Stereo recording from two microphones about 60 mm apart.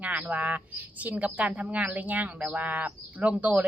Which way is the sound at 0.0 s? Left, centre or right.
Right.